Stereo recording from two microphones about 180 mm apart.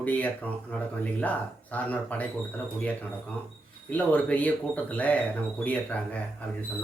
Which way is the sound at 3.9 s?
10° left (ahead or behind).